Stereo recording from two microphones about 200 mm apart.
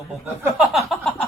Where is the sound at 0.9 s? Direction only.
5° left (ahead or behind).